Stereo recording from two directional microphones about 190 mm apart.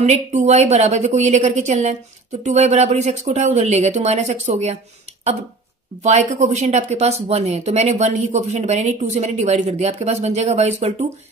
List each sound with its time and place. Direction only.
0.0 s speech: 35° right (ahead or behind)
6.0 s speech: 40° right (ahead or behind)